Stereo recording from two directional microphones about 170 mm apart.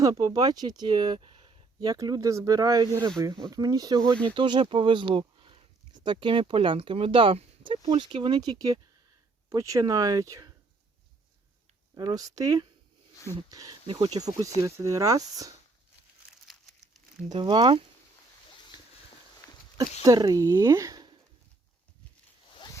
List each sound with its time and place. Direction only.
0.0 s speech: 20° right (ahead or behind)
11.9 s speech: 20° right (ahead or behind)
16.5 s crumpling: centre (ahead or behind)
17.2 s speech: 30° right (ahead or behind)
20.0 s speech: 25° right (ahead or behind)
22.5 s zipper: 25° left (ahead or behind)